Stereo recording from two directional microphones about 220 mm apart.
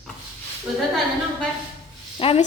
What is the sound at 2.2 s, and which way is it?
Speech, 25° left (ahead or behind).